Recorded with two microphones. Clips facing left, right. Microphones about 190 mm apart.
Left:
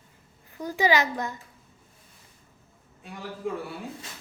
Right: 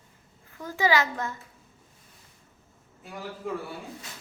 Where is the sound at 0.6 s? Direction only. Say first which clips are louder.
Left 1 dB; 15° left (ahead or behind).